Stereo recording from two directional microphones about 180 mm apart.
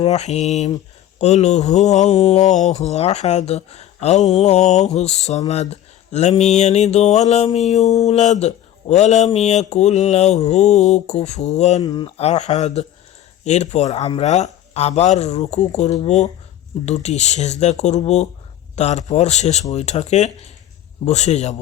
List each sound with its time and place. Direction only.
0.0 s speech: 35° left (ahead or behind)
11.8 s speech: 25° left (ahead or behind)